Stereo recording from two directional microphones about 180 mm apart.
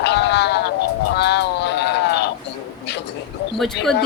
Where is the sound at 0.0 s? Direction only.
70° left (ahead or behind).